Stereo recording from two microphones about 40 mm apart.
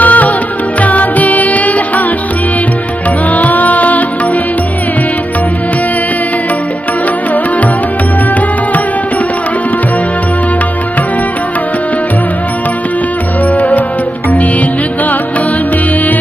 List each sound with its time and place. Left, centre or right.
0.0 s music: left
3.3 s music: left
13.6 s music: left